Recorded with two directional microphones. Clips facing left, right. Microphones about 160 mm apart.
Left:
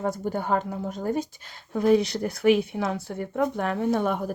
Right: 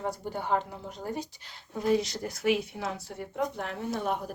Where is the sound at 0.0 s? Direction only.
50° left (ahead or behind).